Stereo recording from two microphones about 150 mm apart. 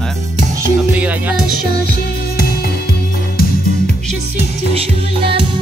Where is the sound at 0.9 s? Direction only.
10° right (ahead or behind).